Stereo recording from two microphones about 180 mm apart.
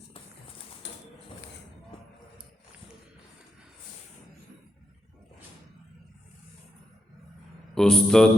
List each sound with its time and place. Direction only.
0.8 s mechanisms: 80° left
7.8 s speech: 5° left (ahead or behind)